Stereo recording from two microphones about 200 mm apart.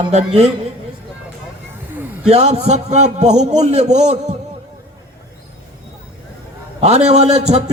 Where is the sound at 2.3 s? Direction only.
35° right (ahead or behind).